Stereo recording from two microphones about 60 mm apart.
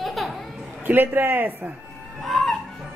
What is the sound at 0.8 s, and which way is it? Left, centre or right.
Speech, right.